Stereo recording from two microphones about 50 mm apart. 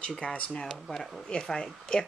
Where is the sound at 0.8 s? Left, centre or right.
Centre.